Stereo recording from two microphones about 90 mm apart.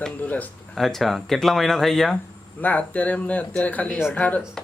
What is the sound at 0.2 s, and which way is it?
Speech, 20° left (ahead or behind).